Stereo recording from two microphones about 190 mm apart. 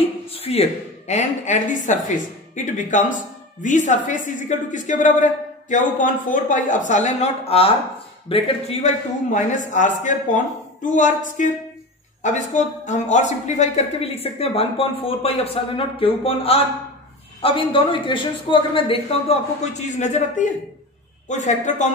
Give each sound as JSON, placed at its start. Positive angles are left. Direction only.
{"t": 0.0, "sound": "a woman's voice", "side_deg": 30}